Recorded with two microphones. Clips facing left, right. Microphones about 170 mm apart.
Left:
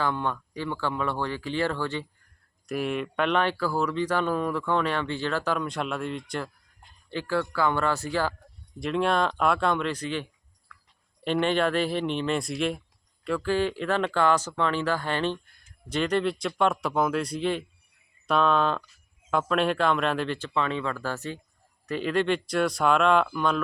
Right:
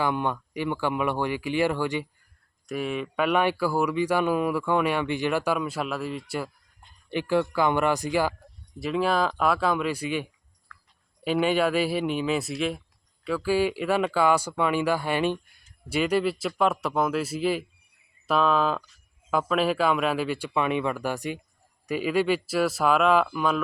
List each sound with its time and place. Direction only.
0.0 s speech: 15° right (ahead or behind)
2.6 s speech: centre (ahead or behind)
7.1 s speech: 15° right (ahead or behind)
8.8 s speech: 5° right (ahead or behind)
10.7 s a sound: 5° left (ahead or behind)
11.2 s speech: 5° right (ahead or behind)